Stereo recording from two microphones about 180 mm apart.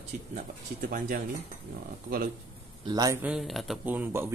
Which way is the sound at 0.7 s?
55° right (ahead or behind).